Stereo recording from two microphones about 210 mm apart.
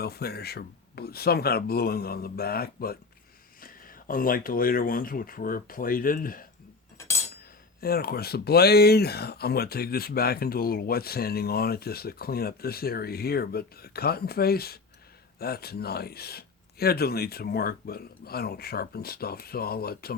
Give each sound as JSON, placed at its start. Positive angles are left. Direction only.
{"t": 0.0, "sound": "speech", "side_deg": 50}
{"t": 7.8, "sound": "speech", "side_deg": 45}